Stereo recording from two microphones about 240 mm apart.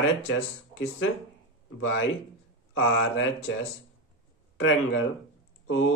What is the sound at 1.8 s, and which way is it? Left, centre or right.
Speech, left.